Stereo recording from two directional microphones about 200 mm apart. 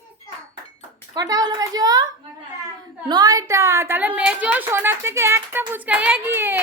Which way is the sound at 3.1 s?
20° right (ahead or behind).